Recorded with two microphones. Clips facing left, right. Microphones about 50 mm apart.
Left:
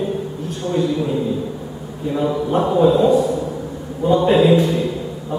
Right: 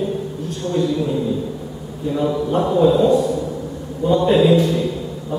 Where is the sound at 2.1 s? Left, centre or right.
Centre.